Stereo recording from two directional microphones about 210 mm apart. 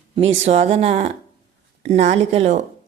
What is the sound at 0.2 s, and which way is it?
A woman's voice, 30° right (ahead or behind).